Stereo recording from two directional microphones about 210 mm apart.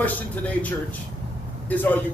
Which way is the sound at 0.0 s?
5° left (ahead or behind).